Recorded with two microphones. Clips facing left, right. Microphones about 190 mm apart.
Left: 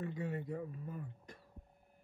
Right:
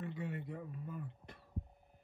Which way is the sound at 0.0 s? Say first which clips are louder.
Left 2 dB; 40° left (ahead or behind).